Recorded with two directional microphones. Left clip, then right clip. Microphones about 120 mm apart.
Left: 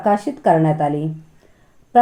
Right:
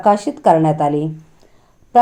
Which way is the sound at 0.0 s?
25° right (ahead or behind).